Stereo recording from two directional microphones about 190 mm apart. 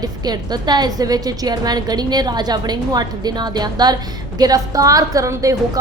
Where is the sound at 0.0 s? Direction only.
20° right (ahead or behind).